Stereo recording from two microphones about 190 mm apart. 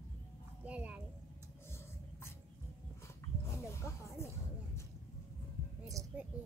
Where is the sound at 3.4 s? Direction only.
15° left (ahead or behind).